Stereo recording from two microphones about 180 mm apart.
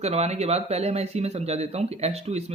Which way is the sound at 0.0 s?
35° right (ahead or behind).